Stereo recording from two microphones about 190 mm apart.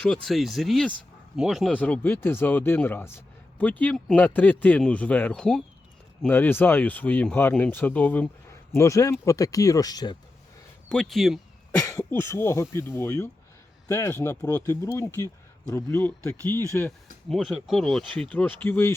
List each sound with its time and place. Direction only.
0.0 s speech: centre (ahead or behind); by 10.2 s 20° left (ahead or behind)
10.8 s speech: 5° left (ahead or behind)
11.8 s speech: 15° left (ahead or behind)
17.2 s speech: centre (ahead or behind)